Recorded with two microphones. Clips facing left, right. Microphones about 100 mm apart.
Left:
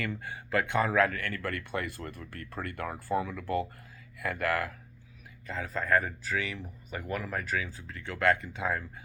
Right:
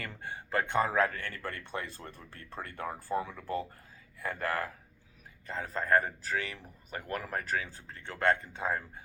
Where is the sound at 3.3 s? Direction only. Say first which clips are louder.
Left 4 dB; 70° left (ahead or behind).